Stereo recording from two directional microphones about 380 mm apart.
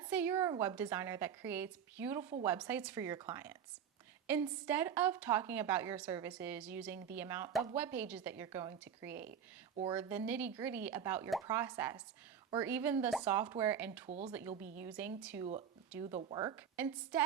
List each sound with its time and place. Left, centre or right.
0.0 s a woman's voice: centre
14.1 s speech: centre
14.6 s a woman's voice: centre